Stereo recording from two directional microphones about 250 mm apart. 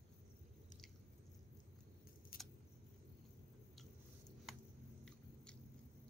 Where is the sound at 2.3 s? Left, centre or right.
Left.